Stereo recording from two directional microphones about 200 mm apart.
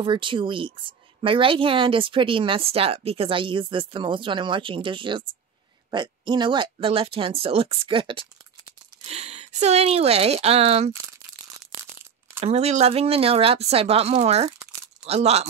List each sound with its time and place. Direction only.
0.0 s a woman's voice: 25° right (ahead or behind)
12.4 s a woman's voice: 30° right (ahead or behind)